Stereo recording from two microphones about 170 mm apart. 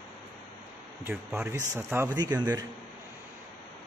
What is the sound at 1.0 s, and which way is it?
Speech, 15° right (ahead or behind).